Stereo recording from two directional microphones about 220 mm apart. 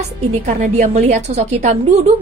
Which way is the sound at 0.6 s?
30° right (ahead or behind).